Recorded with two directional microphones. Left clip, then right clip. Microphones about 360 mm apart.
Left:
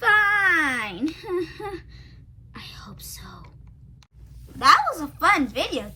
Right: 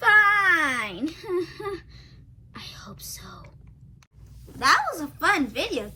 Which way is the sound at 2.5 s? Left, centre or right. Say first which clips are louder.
Even; centre.